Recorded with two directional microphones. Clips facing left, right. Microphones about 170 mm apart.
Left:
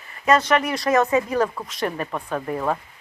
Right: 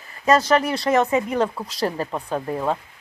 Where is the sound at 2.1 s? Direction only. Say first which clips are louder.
Right 1 dB; 20° right (ahead or behind).